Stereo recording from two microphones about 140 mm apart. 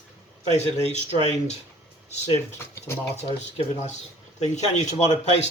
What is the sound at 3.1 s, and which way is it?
A man's voice, 50° left (ahead or behind).